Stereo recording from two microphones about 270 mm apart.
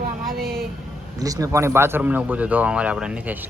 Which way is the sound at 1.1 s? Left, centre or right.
Centre.